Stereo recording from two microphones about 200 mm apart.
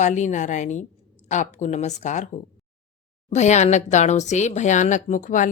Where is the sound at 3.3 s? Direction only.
35° left (ahead or behind).